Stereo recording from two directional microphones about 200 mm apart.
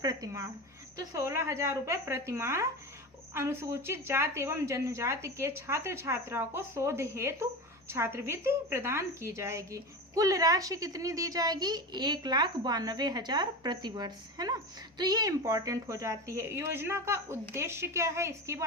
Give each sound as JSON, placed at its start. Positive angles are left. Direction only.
{"t": 0.0, "sound": "a woman's voice", "side_deg": -20}